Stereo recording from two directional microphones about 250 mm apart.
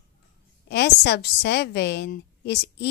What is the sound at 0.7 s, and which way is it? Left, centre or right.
A woman's voice, left.